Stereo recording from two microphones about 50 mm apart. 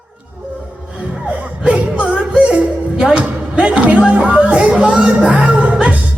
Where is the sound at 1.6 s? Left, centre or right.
Right.